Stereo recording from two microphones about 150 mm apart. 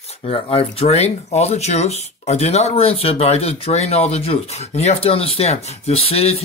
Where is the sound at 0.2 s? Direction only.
40° left (ahead or behind).